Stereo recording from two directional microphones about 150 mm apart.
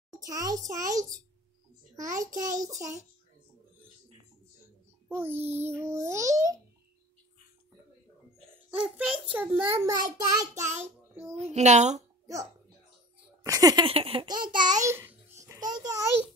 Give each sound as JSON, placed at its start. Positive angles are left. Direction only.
{"t": 0.2, "sound": "a child's voice", "side_deg": -25}
{"t": 5.0, "sound": "a child's voice", "side_deg": -10}
{"t": 8.6, "sound": "a child's voice", "side_deg": -5}
{"t": 11.3, "sound": "speech", "side_deg": -45}
{"t": 12.3, "sound": "hiccup", "side_deg": -20}
{"t": 13.4, "sound": "a sound", "side_deg": -25}
{"t": 13.8, "sound": "baby laughter", "side_deg": -40}
{"t": 14.5, "sound": "a child's voice", "side_deg": -30}